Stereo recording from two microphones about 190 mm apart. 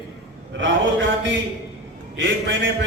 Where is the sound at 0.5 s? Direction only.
75° right (ahead or behind).